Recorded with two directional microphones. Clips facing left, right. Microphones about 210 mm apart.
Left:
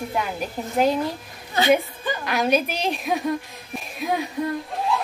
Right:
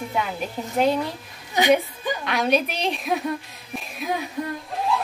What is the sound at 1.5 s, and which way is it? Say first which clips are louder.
Speech: right 1 dB; 15° right (ahead or behind).